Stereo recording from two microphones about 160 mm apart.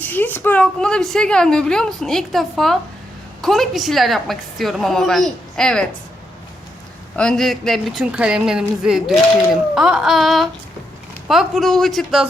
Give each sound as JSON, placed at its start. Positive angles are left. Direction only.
{"t": 0.0, "sound": "a woman's voice", "side_deg": 10}
{"t": 7.2, "sound": "a woman's voice", "side_deg": 5}